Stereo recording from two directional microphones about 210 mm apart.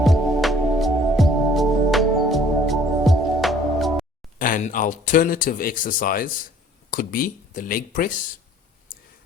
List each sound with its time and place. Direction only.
0.0 s music: centre (ahead or behind)
4.4 s speech: 40° left (ahead or behind)
8.9 s clicking: 45° left (ahead or behind)